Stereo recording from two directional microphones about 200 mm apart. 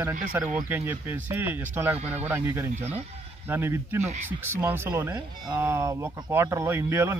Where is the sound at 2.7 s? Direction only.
30° right (ahead or behind).